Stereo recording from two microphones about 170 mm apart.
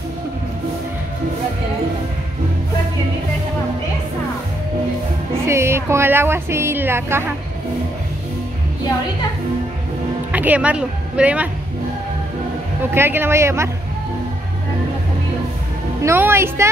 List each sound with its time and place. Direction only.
5.5 s speech: 15° right (ahead or behind)
10.3 s speech: 10° right (ahead or behind)
12.9 s speech: 15° right (ahead or behind)
16.0 s speech: 15° right (ahead or behind)